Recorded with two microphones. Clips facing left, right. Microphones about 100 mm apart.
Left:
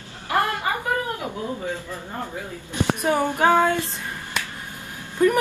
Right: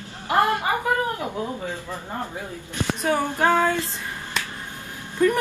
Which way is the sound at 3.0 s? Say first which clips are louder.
Even; 15° left (ahead or behind).